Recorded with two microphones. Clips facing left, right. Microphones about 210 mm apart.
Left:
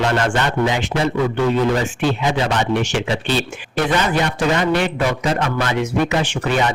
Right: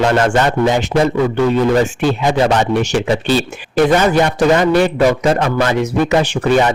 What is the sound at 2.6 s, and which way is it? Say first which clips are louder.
A man's voice: right 4 dB; 40° right (ahead or behind).